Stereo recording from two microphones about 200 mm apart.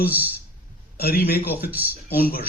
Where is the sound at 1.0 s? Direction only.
50° left (ahead or behind).